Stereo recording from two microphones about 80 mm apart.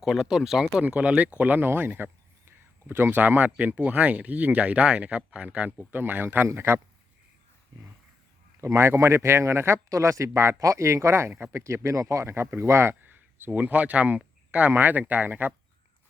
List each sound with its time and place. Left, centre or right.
0.0 s speech: centre; by 6.7 s right
8.6 s speech: right